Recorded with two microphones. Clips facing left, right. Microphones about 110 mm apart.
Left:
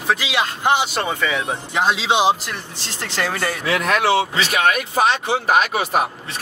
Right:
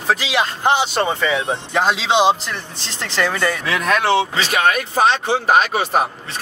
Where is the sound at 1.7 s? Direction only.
5° left (ahead or behind).